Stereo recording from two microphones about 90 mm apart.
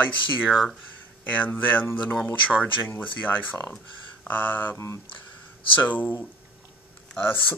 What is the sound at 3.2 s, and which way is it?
Speech, 20° left (ahead or behind).